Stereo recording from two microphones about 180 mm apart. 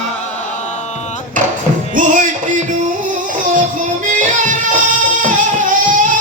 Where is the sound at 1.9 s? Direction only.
45° right (ahead or behind).